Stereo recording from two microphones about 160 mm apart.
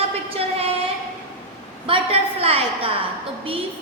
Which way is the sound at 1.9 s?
35° right (ahead or behind).